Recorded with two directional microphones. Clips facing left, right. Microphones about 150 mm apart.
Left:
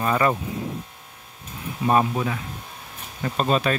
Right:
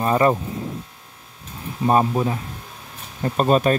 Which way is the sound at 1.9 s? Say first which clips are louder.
Right 3 dB; 30° right (ahead or behind).